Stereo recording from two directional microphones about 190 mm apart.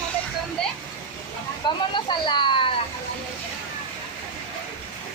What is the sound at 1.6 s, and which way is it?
Speech, 25° left (ahead or behind).